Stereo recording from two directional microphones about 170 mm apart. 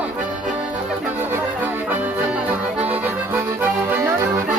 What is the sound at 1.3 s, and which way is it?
Accordion, 10° right (ahead or behind).